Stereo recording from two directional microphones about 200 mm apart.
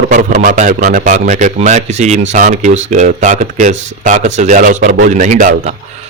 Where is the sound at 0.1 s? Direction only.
40° right (ahead or behind).